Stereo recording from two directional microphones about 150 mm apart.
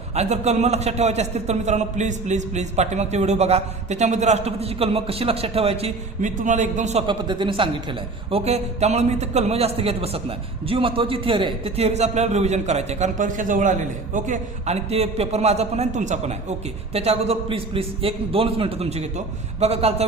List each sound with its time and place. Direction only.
0.1 s a man's voice: 45° right (ahead or behind)
6.2 s a man's voice: 55° right (ahead or behind)
7.1 s speech: 35° right (ahead or behind)
8.3 s a man's voice: 45° right (ahead or behind)